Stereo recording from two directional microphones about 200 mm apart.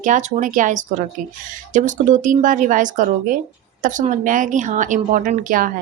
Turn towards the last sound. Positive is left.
turn(degrees=-45)  # may be behind; listen again after turning